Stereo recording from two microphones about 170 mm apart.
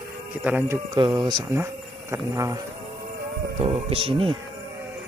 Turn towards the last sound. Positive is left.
turn(degrees=-30)  # may be behind; listen again after turning